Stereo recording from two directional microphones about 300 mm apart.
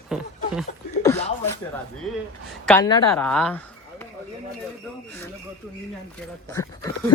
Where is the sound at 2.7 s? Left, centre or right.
Centre.